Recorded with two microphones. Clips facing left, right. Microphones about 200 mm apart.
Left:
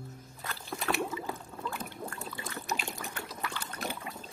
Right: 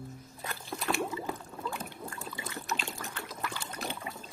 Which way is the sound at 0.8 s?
Centre (ahead or behind).